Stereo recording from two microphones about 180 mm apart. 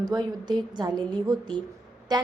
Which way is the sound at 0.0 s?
20° right (ahead or behind).